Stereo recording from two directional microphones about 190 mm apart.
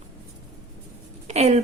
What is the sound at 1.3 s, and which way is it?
Speech, 35° right (ahead or behind).